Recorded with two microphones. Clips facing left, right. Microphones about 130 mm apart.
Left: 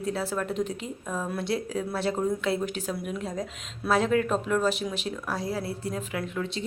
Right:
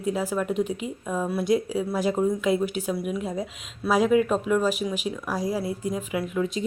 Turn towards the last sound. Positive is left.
turn(degrees=-10)  # may be behind; listen again after turning